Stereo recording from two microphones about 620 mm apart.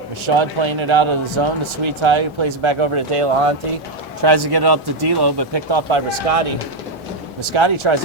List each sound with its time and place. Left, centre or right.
0.3 s a man's voice: right
4.2 s speech: right
7.5 s a man's voice: right